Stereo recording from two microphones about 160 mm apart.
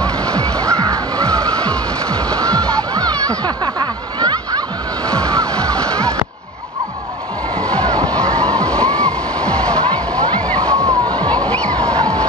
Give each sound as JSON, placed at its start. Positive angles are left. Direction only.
{"t": 0.0, "sound": "music", "side_deg": 5}
{"t": 0.7, "sound": "music", "side_deg": -20}
{"t": 1.6, "sound": "music", "side_deg": 5}
{"t": 2.9, "sound": "a sound", "side_deg": -20}
{"t": 5.0, "sound": "music", "side_deg": 5}
{"t": 5.6, "sound": "a sound", "side_deg": 5}
{"t": 7.5, "sound": "waves", "side_deg": 5}
{"t": 8.1, "sound": "music", "side_deg": 5}
{"t": 10.7, "sound": "water", "side_deg": -20}
{"t": 11.2, "sound": "music", "side_deg": 5}